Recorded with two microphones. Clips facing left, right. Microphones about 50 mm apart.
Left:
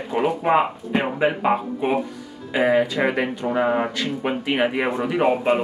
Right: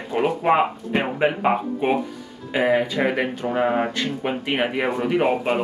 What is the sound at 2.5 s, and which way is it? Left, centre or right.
Speech, centre.